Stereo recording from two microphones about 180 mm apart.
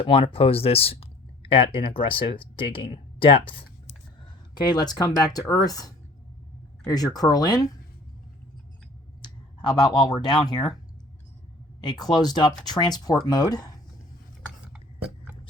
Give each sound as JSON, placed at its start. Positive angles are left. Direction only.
{"t": 0.0, "sound": "speech", "side_deg": 30}
{"t": 9.2, "sound": "speech", "side_deg": 25}
{"t": 11.8, "sound": "speech", "side_deg": 20}